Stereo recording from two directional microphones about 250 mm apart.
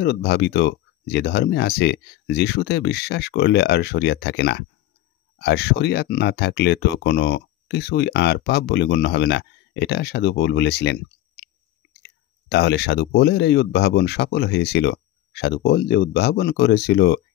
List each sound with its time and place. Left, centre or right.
0.0 s speech: left